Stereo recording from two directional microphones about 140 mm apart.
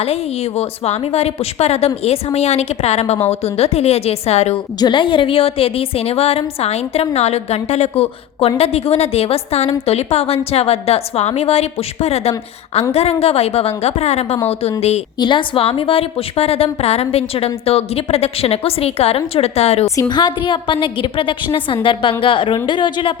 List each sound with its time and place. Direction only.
0.0 s a woman's voice: 45° left (ahead or behind)
4.8 s a woman's voice: 35° left (ahead or behind); by 15.0 s 50° left (ahead or behind)
15.2 s a woman's voice: 35° left (ahead or behind)
20.0 s a woman's voice: 30° left (ahead or behind)